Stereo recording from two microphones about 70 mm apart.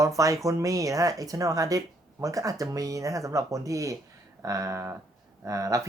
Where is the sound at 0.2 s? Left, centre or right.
Right.